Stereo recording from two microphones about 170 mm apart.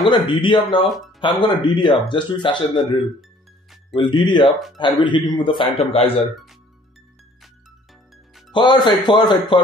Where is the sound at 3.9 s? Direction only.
30° left (ahead or behind).